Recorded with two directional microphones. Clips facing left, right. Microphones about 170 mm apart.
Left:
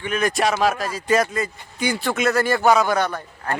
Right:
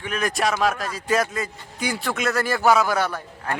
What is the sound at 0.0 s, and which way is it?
A man's voice, centre (ahead or behind).